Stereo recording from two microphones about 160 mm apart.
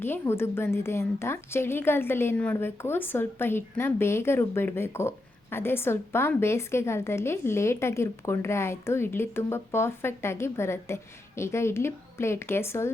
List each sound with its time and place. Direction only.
0.0 s a woman's voice: 15° left (ahead or behind)